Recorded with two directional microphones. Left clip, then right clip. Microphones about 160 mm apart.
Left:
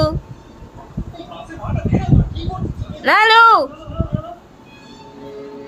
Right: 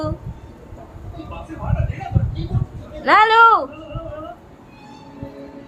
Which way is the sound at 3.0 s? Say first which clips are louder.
Left 1 dB; 25° left (ahead or behind).